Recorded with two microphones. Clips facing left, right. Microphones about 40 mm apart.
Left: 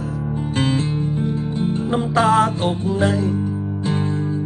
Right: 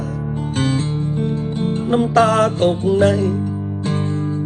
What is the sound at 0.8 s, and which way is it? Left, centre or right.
Music, right.